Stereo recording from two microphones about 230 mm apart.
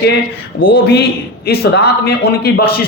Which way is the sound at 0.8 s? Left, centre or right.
Left.